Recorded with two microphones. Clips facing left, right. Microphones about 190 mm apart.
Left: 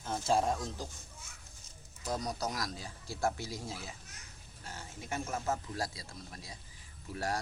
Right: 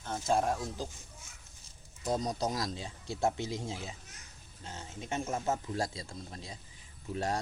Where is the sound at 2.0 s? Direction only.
25° right (ahead or behind).